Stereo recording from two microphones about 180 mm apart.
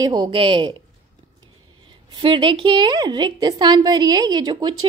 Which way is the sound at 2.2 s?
25° right (ahead or behind).